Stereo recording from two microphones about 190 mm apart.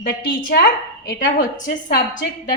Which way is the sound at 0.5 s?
55° left (ahead or behind).